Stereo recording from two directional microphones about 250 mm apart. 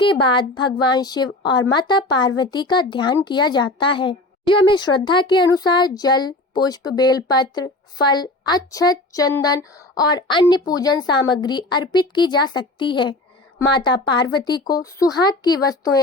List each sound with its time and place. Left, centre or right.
0.0 s a woman's voice: centre